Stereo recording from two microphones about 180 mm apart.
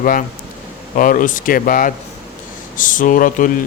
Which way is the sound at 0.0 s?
50° left (ahead or behind).